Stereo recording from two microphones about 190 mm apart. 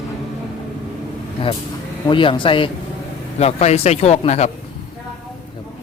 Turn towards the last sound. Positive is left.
turn(degrees=35)  # may be behind; listen again after turning